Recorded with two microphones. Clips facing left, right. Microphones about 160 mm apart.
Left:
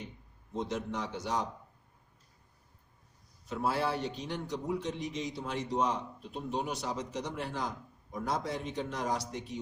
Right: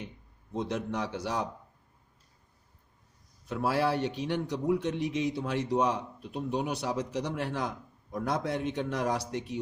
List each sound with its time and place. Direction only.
0.6 s speech: 65° right (ahead or behind)
3.5 s speech: 65° right (ahead or behind)